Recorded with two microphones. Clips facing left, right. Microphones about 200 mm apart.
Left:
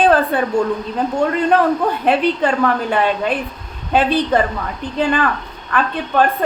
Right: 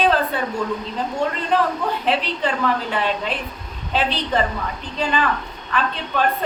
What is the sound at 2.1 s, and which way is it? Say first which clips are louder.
A woman's voice: left 7 dB; 50° left (ahead or behind).